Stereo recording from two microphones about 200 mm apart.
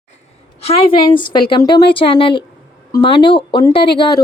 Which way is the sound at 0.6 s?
30° left (ahead or behind).